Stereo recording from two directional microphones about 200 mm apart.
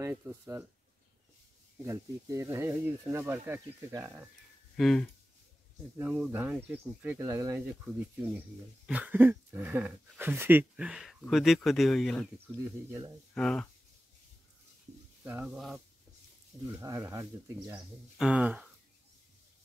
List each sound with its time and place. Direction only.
0.0 s speech: 15° right (ahead or behind)
1.9 s speech: 15° right (ahead or behind)
4.7 s speech: centre (ahead or behind)
13.3 s speech: 5° left (ahead or behind)
15.2 s speech: 5° right (ahead or behind)
16.8 s speech: 10° right (ahead or behind)